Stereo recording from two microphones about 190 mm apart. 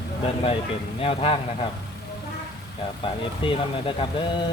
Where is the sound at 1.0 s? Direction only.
30° left (ahead or behind).